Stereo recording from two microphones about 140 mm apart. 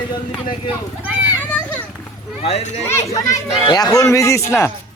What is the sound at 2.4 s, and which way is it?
Speech, 50° left (ahead or behind).